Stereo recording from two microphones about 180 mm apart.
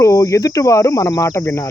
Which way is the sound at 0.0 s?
15° left (ahead or behind).